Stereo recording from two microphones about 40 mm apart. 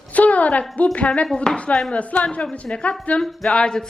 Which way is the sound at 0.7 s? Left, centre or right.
Left.